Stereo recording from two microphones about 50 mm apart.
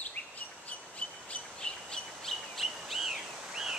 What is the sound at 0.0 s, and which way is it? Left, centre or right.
Bird vocalization, left.